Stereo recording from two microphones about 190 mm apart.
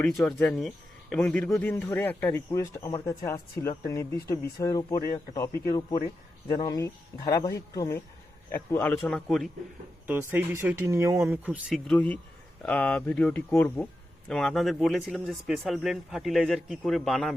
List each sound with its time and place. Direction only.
0.0 s speech: centre (ahead or behind)
10.1 s speech: 10° right (ahead or behind)
11.9 s speech: 10° left (ahead or behind)